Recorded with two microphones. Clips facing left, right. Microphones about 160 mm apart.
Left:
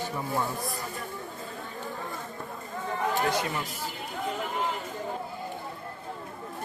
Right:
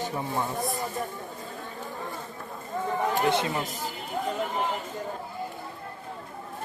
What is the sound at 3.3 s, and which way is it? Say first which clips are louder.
Speech: right 3 dB; 25° right (ahead or behind).